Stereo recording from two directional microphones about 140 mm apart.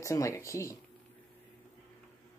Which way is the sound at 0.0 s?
20° left (ahead or behind).